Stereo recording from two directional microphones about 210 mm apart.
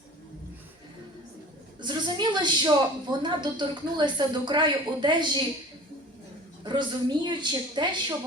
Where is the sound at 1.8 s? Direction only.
20° right (ahead or behind).